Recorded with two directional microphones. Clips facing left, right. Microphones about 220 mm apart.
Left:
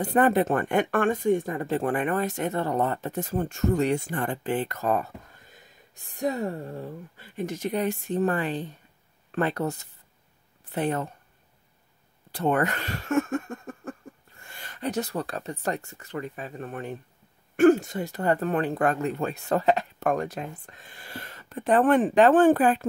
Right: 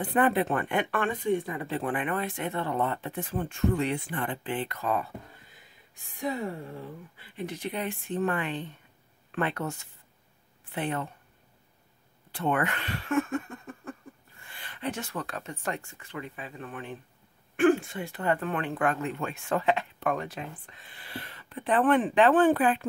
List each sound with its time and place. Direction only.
0.0 s speech: 40° left (ahead or behind)
12.3 s a sound: 40° left (ahead or behind)
14.4 s speech: 45° left (ahead or behind)